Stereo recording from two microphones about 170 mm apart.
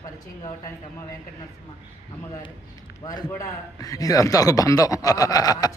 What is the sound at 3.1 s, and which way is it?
A man's voice, 20° left (ahead or behind).